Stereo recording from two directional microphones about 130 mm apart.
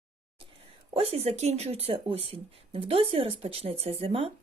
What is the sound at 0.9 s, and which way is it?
Speech, 50° right (ahead or behind).